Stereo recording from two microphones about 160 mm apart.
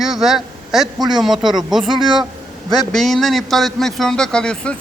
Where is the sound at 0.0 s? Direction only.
5° right (ahead or behind).